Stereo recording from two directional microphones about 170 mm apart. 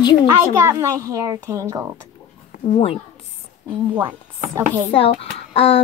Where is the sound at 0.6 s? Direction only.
20° right (ahead or behind).